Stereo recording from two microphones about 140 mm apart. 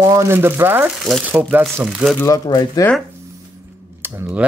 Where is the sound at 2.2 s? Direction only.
25° left (ahead or behind).